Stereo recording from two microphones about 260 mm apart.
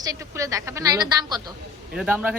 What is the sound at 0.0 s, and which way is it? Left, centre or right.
A woman's voice, centre.